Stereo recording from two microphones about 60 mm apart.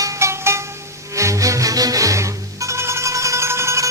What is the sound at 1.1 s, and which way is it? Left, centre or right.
Music, right.